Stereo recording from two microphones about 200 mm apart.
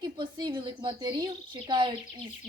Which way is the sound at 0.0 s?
20° right (ahead or behind).